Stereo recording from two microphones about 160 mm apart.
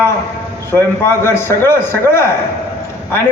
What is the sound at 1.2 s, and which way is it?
A man's voice, 15° left (ahead or behind).